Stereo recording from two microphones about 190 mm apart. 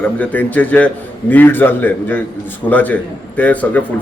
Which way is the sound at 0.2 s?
10° left (ahead or behind).